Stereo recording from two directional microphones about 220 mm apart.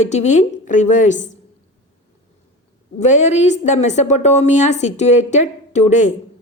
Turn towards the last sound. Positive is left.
turn(degrees=35)  # may be behind; listen again after turning